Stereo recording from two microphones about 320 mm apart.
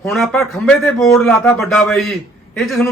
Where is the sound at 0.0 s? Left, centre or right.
Centre.